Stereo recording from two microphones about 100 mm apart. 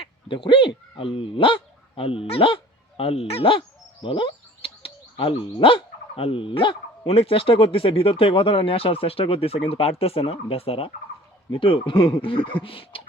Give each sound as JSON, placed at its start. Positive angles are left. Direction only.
{"t": 0.0, "sound": "speech", "side_deg": 55}